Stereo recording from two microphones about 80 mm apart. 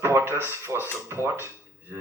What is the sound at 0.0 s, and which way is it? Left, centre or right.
Speech, right.